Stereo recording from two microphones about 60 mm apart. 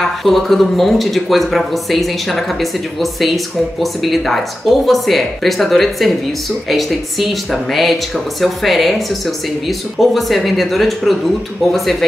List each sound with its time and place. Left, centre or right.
0.2 s speech: centre